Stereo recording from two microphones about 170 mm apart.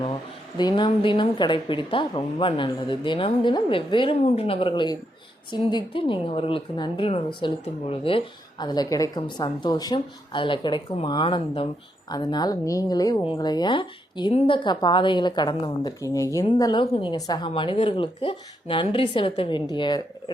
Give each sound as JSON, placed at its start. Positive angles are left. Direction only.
{"t": 0.5, "sound": "a woman's voice", "side_deg": 25}